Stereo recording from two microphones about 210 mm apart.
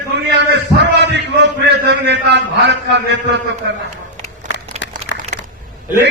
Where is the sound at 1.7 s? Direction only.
55° right (ahead or behind).